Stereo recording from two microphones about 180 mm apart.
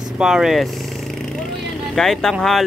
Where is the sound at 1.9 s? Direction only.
5° left (ahead or behind).